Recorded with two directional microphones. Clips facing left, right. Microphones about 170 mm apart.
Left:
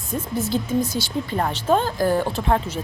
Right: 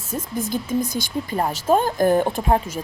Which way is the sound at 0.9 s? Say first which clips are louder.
Even; 15° right (ahead or behind).